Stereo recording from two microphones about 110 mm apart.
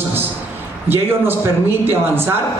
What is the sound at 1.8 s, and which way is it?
Speech, 20° right (ahead or behind).